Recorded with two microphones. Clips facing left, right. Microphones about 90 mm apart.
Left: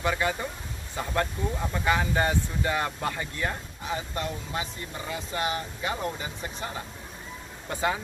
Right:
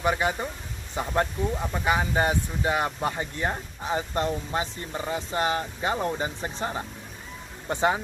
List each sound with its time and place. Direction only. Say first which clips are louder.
0.0 s speech: right 2 dB; 20° right (ahead or behind)